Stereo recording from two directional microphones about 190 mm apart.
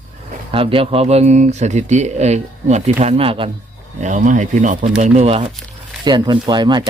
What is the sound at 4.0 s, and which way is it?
Speech, 40° right (ahead or behind).